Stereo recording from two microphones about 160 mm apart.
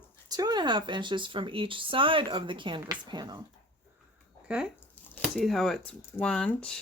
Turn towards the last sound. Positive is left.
turn(degrees=5)  # may be behind; listen again after turning